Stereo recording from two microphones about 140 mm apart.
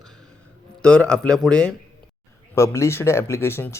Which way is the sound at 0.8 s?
5° left (ahead or behind).